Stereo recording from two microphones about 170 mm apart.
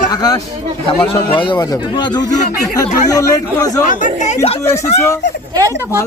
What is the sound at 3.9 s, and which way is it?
Speech, 45° left (ahead or behind).